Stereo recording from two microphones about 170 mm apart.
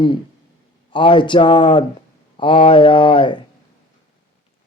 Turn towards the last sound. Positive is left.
turn(degrees=30)  # may be behind; listen again after turning